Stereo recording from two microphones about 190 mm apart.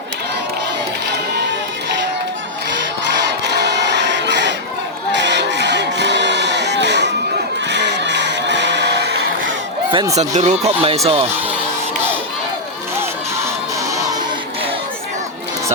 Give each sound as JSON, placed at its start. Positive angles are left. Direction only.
{"t": 3.2, "sound": "music", "side_deg": -65}
{"t": 5.1, "sound": "a sound", "side_deg": -65}
{"t": 7.7, "sound": "crowd", "side_deg": -65}
{"t": 9.9, "sound": "speech", "side_deg": -20}
{"t": 10.2, "sound": "speech", "side_deg": -35}